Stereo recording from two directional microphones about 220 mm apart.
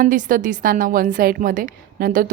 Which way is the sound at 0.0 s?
40° right (ahead or behind).